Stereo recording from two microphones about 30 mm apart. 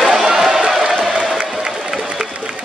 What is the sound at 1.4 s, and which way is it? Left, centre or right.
Applause, right.